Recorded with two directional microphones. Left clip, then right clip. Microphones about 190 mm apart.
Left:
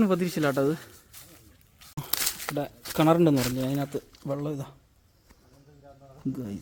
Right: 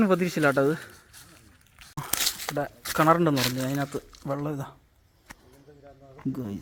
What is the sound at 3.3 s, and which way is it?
Speech, 35° right (ahead or behind).